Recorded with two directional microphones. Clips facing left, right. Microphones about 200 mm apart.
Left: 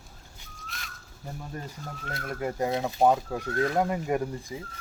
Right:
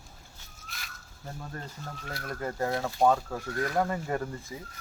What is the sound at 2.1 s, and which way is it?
Speech, 20° left (ahead or behind).